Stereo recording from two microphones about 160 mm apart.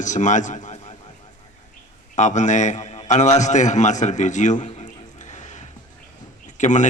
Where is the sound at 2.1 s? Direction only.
50° left (ahead or behind).